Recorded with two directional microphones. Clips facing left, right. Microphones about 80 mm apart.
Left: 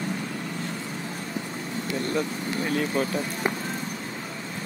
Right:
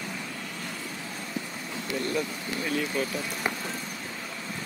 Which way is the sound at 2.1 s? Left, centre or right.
Left.